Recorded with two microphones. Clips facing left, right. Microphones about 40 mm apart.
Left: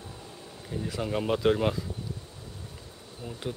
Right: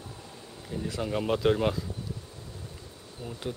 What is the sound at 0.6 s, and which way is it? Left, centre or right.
Speech, centre.